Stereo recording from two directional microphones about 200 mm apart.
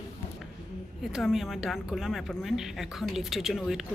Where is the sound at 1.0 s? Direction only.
Centre (ahead or behind).